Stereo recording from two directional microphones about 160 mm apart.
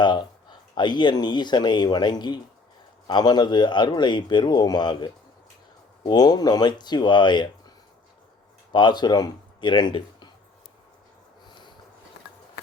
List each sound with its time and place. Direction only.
0.0 s speech: 30° left (ahead or behind)
8.7 s speech: 25° left (ahead or behind)